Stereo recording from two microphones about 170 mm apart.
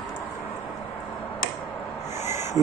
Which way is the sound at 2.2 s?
15° right (ahead or behind).